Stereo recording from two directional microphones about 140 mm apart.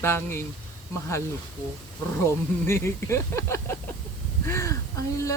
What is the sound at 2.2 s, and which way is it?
Speech, 20° left (ahead or behind).